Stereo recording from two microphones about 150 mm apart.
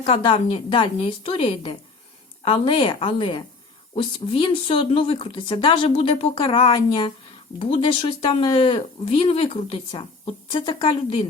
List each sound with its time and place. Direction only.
0.0 s speech: 40° left (ahead or behind)